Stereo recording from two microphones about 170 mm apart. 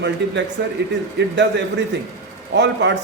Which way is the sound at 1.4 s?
90° right.